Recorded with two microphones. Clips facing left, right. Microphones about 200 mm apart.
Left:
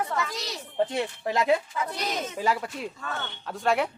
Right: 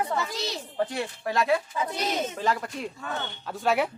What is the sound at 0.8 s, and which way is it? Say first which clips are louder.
Speech: left 3 dB; 20° left (ahead or behind).